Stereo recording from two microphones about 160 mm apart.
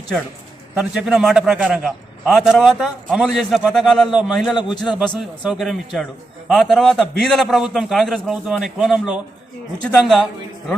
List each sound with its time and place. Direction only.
0.8 s a man's voice: 5° right (ahead or behind)